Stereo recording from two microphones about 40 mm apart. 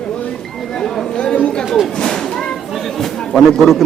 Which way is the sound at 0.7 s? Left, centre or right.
Centre.